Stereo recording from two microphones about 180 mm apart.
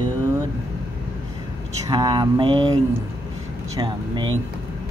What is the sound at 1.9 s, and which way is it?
Mantra, 25° right (ahead or behind).